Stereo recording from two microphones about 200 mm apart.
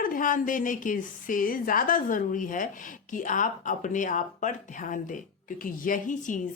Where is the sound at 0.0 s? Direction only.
45° left (ahead or behind).